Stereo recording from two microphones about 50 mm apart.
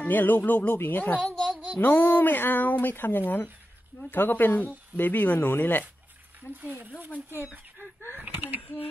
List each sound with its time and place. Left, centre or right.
0.0 s speech: left
6.6 s speech: right
8.1 s a sound: right